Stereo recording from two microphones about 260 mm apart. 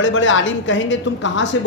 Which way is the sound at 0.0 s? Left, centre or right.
Left.